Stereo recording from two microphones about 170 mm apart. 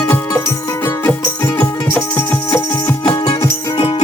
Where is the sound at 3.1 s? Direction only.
30° left (ahead or behind).